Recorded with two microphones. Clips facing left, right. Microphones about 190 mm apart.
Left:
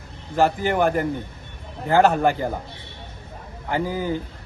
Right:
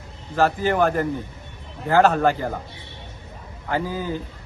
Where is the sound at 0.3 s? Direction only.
15° left (ahead or behind).